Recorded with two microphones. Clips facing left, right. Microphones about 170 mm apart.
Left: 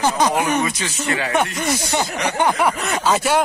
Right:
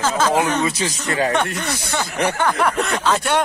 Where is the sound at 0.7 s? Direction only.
35° right (ahead or behind).